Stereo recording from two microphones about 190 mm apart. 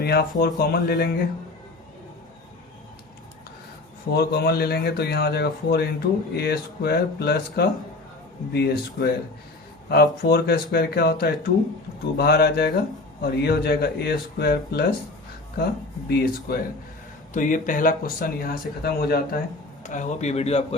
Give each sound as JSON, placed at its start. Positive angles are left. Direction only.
{"t": 0.0, "sound": "speech", "side_deg": 55}
{"t": 4.1, "sound": "speech", "side_deg": 60}
{"t": 16.0, "sound": "speech", "side_deg": 50}
{"t": 19.8, "sound": "speech", "side_deg": 40}